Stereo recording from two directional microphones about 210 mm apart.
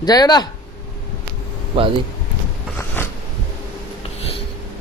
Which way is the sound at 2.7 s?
10° left (ahead or behind).